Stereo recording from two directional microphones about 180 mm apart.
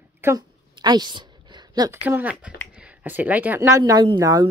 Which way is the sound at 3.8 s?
25° right (ahead or behind).